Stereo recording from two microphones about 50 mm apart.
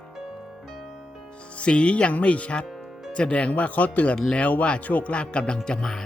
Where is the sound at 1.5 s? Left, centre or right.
Left.